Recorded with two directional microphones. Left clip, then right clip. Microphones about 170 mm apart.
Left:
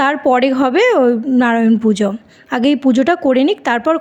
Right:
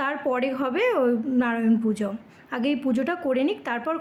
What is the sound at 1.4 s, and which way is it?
Speech, 45° left (ahead or behind).